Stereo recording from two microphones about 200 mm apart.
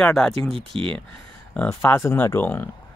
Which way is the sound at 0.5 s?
25° right (ahead or behind).